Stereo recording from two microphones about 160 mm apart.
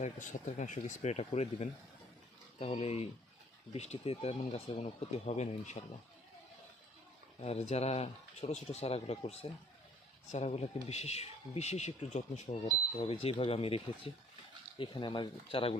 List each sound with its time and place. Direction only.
0.0 s speech: 50° left (ahead or behind)
7.4 s speech: 40° left (ahead or behind)